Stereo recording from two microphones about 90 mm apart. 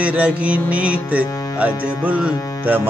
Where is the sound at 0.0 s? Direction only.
15° right (ahead or behind).